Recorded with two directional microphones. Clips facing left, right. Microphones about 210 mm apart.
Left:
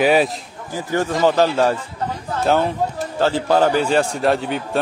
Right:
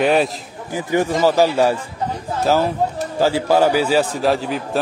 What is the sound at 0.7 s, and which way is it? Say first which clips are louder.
A man's voice: right 2 dB; 15° right (ahead or behind).